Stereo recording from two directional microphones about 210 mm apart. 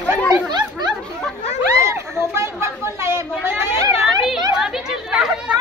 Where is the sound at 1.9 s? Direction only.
10° right (ahead or behind).